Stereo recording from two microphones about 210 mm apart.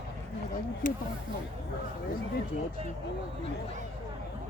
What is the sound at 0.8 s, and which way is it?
Speech, 40° left (ahead or behind).